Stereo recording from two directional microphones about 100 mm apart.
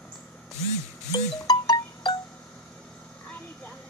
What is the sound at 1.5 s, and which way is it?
Music, 55° left (ahead or behind).